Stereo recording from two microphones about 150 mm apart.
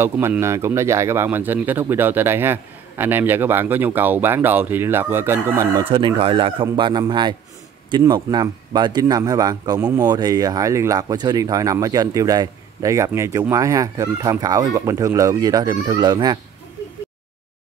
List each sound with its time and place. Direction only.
0.0 s speech: 15° right (ahead or behind)
5.9 s speech: 35° right (ahead or behind)